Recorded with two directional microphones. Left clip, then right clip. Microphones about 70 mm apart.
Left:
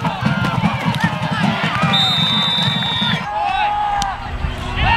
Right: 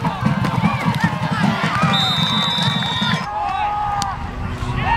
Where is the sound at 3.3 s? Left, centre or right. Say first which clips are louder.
Left 5 dB; left.